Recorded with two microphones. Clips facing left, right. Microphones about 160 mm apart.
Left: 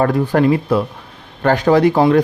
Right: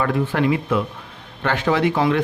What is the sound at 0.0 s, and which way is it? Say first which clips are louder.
A man's voice: left 6 dB; 40° left (ahead or behind).